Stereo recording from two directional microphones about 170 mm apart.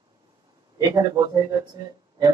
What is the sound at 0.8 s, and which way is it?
Speech, 20° right (ahead or behind).